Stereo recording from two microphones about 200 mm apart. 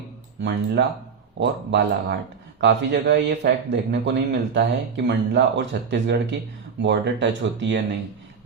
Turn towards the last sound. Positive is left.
turn(degrees=-60)  # may be behind; listen again after turning